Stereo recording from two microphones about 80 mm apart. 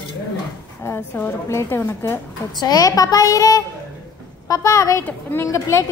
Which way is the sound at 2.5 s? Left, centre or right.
Left.